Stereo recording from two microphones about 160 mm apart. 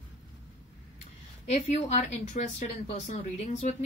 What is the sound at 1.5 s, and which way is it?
Speech, 45° left (ahead or behind).